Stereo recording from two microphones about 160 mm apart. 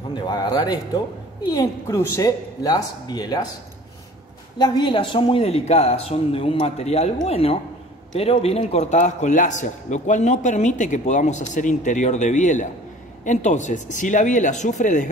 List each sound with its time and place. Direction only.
0.1 s a woman's voice: 25° left (ahead or behind)
4.6 s a man's voice: 25° left (ahead or behind); by 15.0 s 50° left (ahead or behind)